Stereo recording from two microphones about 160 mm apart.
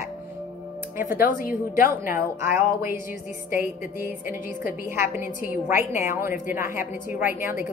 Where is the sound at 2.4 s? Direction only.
15° right (ahead or behind).